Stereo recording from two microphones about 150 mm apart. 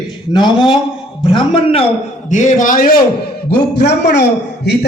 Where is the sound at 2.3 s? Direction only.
55° left (ahead or behind).